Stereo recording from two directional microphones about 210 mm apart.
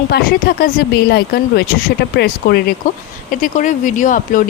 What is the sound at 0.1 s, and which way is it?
Speech, 45° left (ahead or behind).